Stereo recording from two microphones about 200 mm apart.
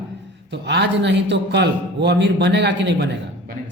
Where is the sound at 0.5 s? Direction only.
60° right (ahead or behind).